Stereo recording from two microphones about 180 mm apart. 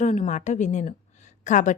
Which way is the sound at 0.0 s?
45° left (ahead or behind).